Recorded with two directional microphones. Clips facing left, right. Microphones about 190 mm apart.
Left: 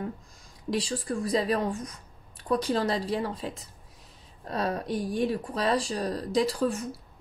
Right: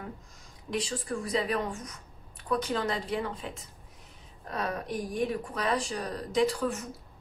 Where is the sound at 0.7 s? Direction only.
35° left (ahead or behind).